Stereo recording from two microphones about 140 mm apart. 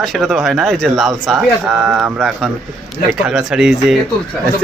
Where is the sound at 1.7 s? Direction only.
10° right (ahead or behind).